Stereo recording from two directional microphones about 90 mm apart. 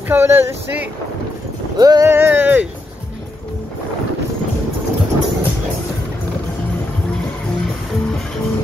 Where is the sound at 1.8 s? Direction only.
45° right (ahead or behind).